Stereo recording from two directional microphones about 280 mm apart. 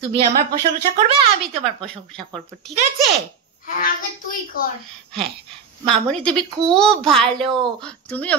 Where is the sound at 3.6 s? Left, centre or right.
Left.